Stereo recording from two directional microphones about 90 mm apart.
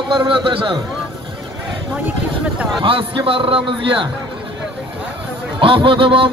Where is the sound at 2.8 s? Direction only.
75° right (ahead or behind).